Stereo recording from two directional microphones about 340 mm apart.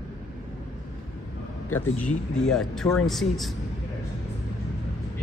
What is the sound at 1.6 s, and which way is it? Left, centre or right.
Speech, centre.